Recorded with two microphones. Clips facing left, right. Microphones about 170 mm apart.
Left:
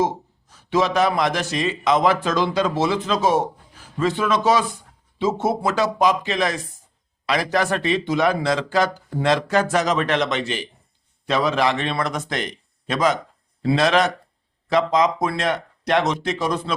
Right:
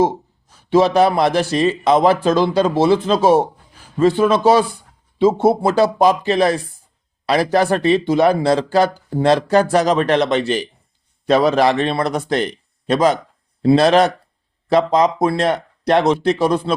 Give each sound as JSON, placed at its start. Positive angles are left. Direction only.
{"t": 0.0, "sound": "a man's voice", "side_deg": -30}